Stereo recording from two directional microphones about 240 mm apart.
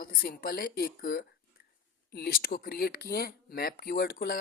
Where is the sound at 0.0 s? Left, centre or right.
Left.